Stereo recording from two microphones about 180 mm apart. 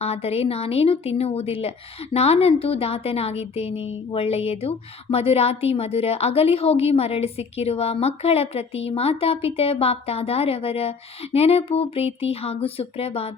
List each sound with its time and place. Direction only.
0.0 s a woman's voice: 35° left (ahead or behind)